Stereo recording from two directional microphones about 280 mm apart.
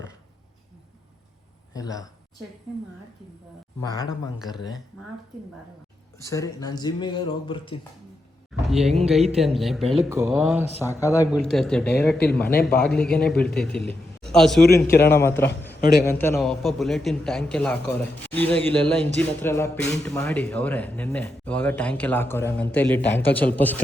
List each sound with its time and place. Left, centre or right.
1.7 s speech: centre
3.8 s speech: centre
6.2 s speech: centre
8.5 s a sound: centre
9.6 s a man's voice: centre
10.8 s speech: centre
11.3 s a man's voice: centre
12.3 s speech: left
12.6 s a man's voice: centre